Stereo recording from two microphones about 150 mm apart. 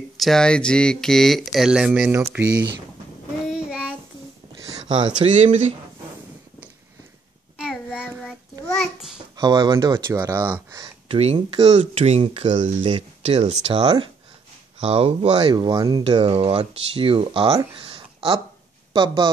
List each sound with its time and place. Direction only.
0.2 s speech: 5° left (ahead or behind)
3.4 s child singing: 5° right (ahead or behind)
4.6 s a sound: 30° right (ahead or behind)
5.2 s speech: 55° right (ahead or behind)
7.5 s child singing: 5° right (ahead or behind)
9.4 s speech: 30° right (ahead or behind)
10.7 s a sound: 25° right (ahead or behind)
11.3 s speech: 30° right (ahead or behind)
11.8 s speech: 45° right (ahead or behind)
15.5 s speech: 25° right (ahead or behind)
16.0 s speech: 40° right (ahead or behind)
17.7 s a sound: 35° right (ahead or behind)